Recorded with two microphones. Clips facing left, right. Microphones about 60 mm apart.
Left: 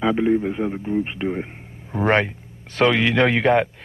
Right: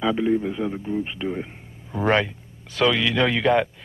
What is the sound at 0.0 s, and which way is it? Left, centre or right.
Speech, left.